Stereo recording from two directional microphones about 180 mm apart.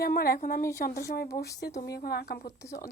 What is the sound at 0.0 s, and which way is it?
A woman's voice, 55° left (ahead or behind).